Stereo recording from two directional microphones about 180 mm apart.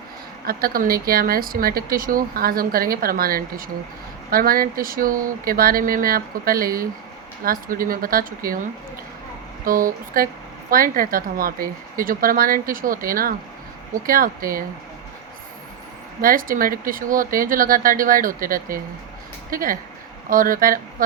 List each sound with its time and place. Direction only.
0.4 s a woman's voice: 55° right (ahead or behind)
9.6 s a woman's voice: 50° right (ahead or behind)
16.2 s a woman's voice: 50° right (ahead or behind)